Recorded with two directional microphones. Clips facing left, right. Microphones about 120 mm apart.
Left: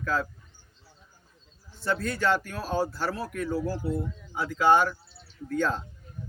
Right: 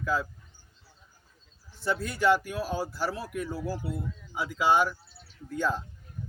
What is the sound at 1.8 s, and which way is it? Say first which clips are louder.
Speech: even; 10° right (ahead or behind).